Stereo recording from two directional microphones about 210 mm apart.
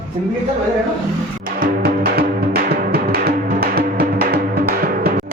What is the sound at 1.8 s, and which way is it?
Music, 45° right (ahead or behind).